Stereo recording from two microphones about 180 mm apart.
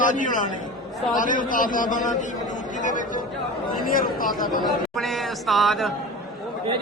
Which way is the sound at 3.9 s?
50° left (ahead or behind).